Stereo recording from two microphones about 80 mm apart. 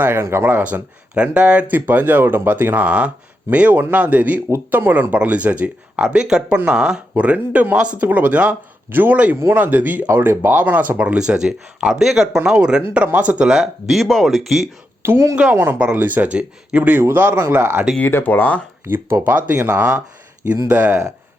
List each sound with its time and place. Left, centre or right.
0.0 s speech: right
0.5 s speech: centre
15.0 s speech: right
18.0 s speech: left
19.2 s speech: right